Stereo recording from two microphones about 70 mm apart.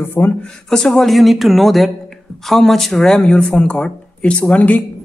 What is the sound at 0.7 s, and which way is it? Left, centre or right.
Speech, centre.